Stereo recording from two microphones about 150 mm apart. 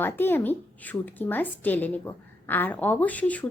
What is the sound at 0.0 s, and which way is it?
A woman's voice, 15° left (ahead or behind).